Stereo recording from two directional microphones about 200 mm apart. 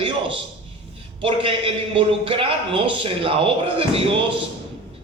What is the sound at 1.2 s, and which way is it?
A man's voice, 25° right (ahead or behind).